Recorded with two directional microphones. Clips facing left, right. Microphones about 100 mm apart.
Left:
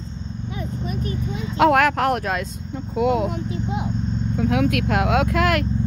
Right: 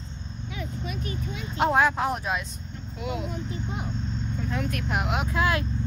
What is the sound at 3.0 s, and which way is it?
Vehicle, 85° left.